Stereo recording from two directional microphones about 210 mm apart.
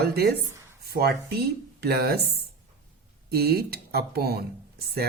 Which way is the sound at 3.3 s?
45° right (ahead or behind).